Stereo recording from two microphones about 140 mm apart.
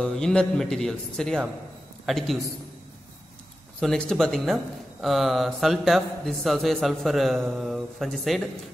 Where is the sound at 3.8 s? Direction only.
5° left (ahead or behind).